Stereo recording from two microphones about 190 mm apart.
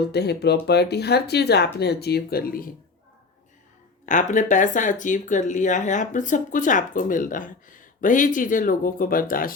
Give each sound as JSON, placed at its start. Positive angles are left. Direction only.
{"t": 0.0, "sound": "speech", "side_deg": 60}
{"t": 4.0, "sound": "speech", "side_deg": 40}